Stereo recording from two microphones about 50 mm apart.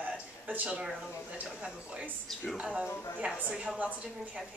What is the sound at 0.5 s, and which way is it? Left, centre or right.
Speech, right.